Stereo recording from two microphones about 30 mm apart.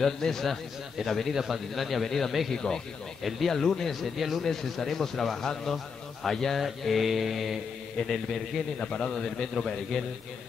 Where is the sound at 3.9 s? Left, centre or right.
Centre.